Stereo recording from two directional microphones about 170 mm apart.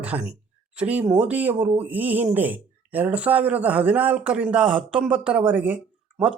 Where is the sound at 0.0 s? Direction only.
10° right (ahead or behind).